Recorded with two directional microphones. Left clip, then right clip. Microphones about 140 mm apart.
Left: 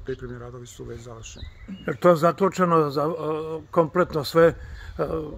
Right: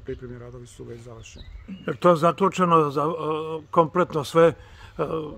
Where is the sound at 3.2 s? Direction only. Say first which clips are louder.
Right 1 dB; 35° right (ahead or behind).